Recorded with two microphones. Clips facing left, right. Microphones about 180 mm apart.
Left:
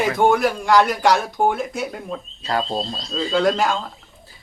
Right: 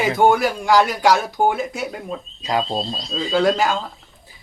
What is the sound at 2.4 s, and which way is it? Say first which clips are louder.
Speech: right 1 dB; 15° right (ahead or behind).